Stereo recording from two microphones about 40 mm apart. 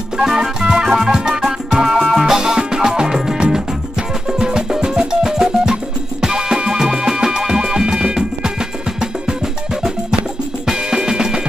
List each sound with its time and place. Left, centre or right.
0.2 s organ: centre
1.9 s music: centre
2.2 s music: centre
10.7 s drum kit: centre